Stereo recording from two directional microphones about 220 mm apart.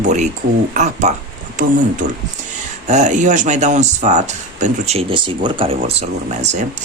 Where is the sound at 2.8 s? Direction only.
35° right (ahead or behind).